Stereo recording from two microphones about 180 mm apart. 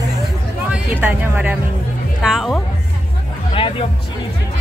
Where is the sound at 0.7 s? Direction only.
10° right (ahead or behind).